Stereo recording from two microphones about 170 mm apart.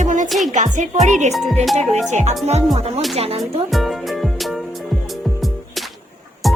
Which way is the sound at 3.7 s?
Centre (ahead or behind).